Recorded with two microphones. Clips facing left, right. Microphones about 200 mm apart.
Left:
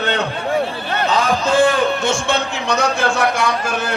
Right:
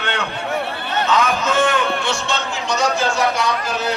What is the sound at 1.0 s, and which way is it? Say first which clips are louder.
A man's voice: left 2 dB; 30° left (ahead or behind).